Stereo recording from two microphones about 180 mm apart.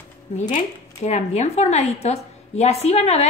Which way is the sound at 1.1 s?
40° left (ahead or behind).